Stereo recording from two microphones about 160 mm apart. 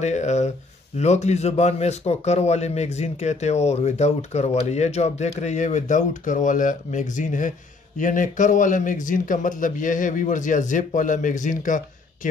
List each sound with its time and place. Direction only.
0.0 s a man's voice: 45° left (ahead or behind)